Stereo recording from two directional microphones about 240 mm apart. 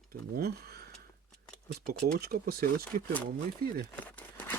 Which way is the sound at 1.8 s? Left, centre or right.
Right.